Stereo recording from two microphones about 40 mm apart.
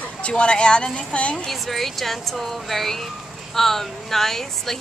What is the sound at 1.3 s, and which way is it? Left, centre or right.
A woman's voice, centre.